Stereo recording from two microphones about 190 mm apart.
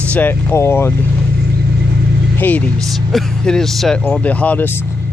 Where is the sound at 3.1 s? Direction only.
Centre (ahead or behind).